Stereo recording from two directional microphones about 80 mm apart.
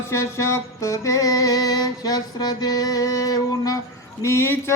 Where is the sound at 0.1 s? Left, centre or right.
Left.